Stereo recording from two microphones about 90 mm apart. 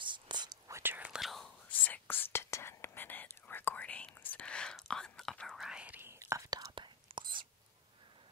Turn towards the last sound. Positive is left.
turn(degrees=-65)  # may be behind; listen again after turning